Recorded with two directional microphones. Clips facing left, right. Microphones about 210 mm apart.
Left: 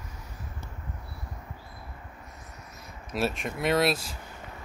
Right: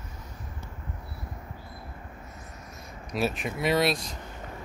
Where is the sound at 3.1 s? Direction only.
Centre (ahead or behind).